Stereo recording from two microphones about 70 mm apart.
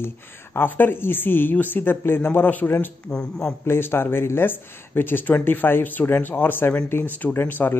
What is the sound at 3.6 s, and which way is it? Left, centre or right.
Speech, left.